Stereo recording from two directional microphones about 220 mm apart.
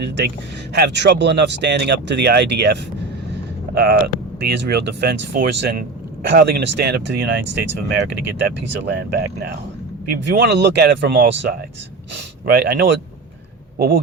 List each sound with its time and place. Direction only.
0.7 s speech: 50° right (ahead or behind)
3.8 s speech: 45° right (ahead or behind)